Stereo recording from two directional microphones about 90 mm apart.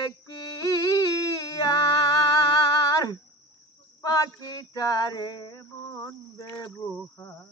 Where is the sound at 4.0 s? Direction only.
40° left (ahead or behind).